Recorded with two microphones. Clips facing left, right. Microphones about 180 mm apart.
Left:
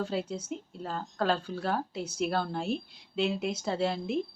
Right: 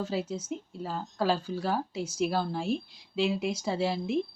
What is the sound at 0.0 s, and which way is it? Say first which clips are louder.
A woman's voice: even; 5° right (ahead or behind).